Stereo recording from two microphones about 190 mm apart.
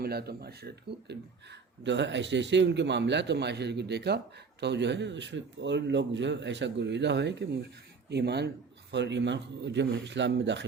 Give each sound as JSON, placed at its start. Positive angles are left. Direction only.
{"t": 0.0, "sound": "a man's voice", "side_deg": -55}